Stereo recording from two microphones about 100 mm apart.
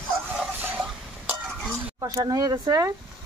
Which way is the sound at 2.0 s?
35° right (ahead or behind).